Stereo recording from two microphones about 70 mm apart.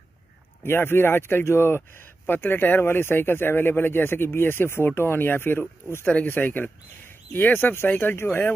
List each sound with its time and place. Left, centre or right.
0.7 s speech: left